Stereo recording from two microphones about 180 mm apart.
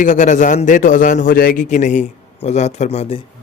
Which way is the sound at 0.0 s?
45° left (ahead or behind).